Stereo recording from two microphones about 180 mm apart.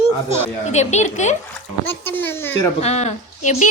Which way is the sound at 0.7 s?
40° left (ahead or behind).